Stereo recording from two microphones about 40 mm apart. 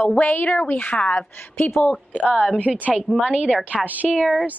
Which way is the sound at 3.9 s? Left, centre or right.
Right.